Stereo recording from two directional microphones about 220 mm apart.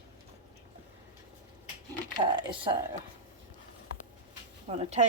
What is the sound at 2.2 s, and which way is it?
Speech, 20° right (ahead or behind).